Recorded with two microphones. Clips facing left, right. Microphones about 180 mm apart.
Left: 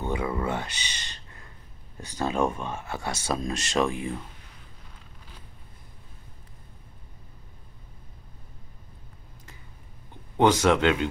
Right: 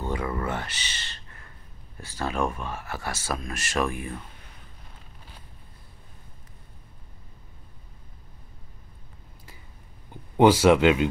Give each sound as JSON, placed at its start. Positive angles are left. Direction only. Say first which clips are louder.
{"t": 0.1, "sound": "a sound", "louder": "left 2 dB", "side_deg": 15}
{"t": 2.0, "sound": "speech", "louder": "left 2 dB", "side_deg": 20}
{"t": 10.3, "sound": "speech", "louder": "right 3 dB", "side_deg": -10}